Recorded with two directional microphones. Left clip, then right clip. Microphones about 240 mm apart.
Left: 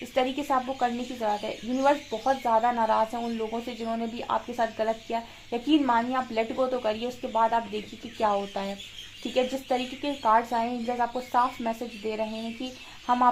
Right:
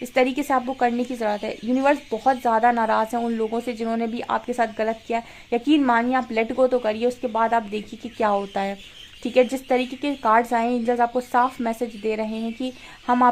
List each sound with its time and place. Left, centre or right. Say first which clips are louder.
0.1 s speech: right 5 dB; right